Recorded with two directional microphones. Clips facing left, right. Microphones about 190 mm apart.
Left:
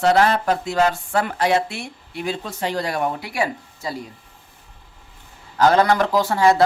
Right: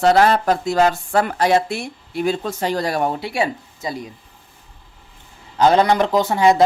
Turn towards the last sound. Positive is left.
turn(degrees=-20)  # may be behind; listen again after turning